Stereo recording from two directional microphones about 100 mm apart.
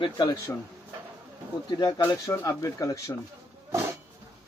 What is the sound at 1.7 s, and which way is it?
Speech, 45° left (ahead or behind).